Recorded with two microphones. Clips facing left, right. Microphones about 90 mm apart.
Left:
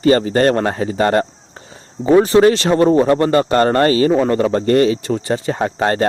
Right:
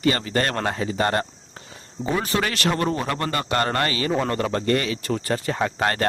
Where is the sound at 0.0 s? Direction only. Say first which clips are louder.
Left 10 dB; 35° left (ahead or behind).